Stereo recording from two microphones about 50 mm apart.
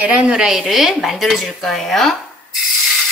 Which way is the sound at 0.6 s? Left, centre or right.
Centre.